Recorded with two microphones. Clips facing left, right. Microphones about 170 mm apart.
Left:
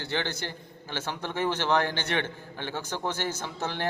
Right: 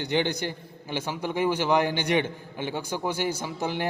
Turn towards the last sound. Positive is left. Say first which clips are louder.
# right 4 dB
turn(degrees=-10)  # may be behind; listen again after turning